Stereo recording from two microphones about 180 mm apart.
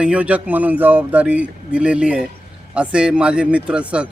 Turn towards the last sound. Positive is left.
turn(degrees=-5)  # may be behind; listen again after turning